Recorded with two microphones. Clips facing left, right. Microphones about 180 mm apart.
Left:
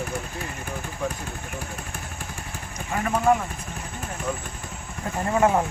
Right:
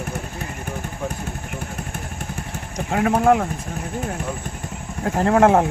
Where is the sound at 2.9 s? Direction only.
65° right (ahead or behind).